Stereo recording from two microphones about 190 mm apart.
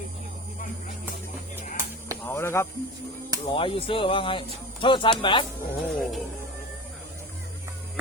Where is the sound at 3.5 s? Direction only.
30° left (ahead or behind).